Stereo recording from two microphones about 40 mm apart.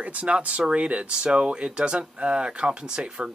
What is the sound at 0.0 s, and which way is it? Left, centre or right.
Speech, right.